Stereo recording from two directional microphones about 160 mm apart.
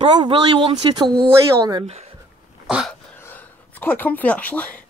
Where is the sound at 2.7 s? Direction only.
5° right (ahead or behind).